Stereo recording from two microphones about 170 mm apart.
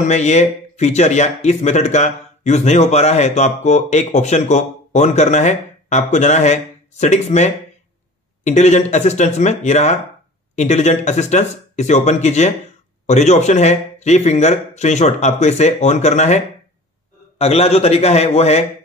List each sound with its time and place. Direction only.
0.1 s speech: 40° left (ahead or behind)